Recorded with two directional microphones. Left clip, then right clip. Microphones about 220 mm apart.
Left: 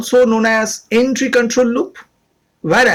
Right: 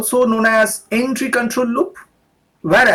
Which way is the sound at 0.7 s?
30° left (ahead or behind).